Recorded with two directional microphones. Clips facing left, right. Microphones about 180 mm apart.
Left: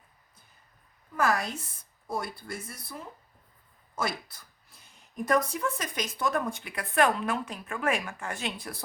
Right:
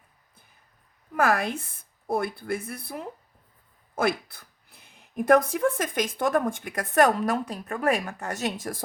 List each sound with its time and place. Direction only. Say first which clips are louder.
1.1 s speech: right 4 dB; 55° right (ahead or behind)